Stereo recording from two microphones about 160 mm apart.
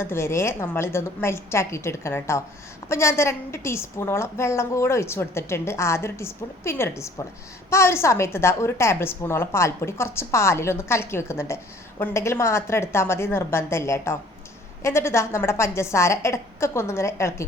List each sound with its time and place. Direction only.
0.0 s a woman's voice: 15° left (ahead or behind)